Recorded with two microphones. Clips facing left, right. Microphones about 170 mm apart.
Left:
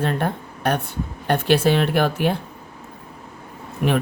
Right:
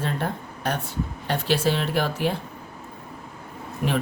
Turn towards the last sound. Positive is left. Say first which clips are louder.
# left 5 dB
turn(degrees=65)  # may be behind; listen again after turning